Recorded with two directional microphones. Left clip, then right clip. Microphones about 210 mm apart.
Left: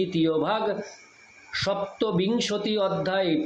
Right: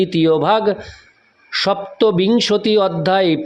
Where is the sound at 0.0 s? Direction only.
50° right (ahead or behind).